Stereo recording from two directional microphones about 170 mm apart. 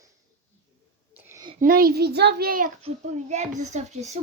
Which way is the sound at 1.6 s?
55° right (ahead or behind).